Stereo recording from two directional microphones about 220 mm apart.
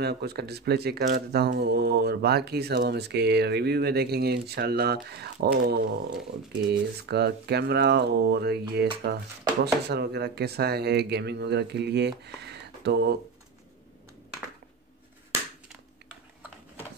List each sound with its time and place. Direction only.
0.0 s speech: 45° right (ahead or behind)